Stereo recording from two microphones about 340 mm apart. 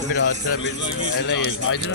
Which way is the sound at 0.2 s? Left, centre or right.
Left.